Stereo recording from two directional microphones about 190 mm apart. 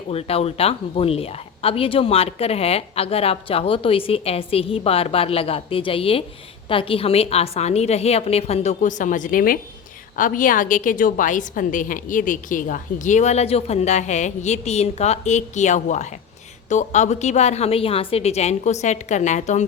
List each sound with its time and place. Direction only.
0.1 s a woman's voice: 30° left (ahead or behind)